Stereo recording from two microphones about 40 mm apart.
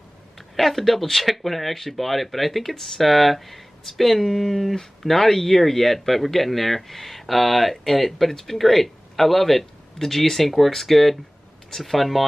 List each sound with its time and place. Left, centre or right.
0.4 s speech: centre